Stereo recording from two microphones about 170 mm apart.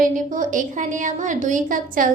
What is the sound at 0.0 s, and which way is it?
A woman's voice, 50° right (ahead or behind).